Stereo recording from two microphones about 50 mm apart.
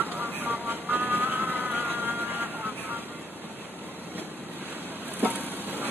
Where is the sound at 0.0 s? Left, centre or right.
Right.